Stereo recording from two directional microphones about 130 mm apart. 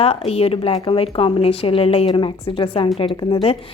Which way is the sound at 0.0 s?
50° left (ahead or behind).